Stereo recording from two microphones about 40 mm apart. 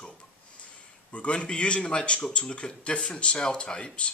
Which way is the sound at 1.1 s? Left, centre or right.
Left.